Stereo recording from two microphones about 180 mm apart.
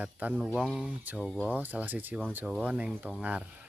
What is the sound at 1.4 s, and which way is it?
Speech, 10° right (ahead or behind).